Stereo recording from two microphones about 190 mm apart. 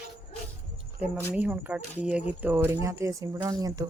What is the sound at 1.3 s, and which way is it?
Speech, 10° right (ahead or behind).